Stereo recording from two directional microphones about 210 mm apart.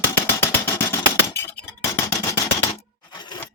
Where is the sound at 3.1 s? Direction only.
20° left (ahead or behind).